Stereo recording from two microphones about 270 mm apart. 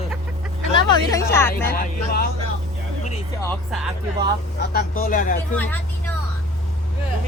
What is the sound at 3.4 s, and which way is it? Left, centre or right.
Speech, centre.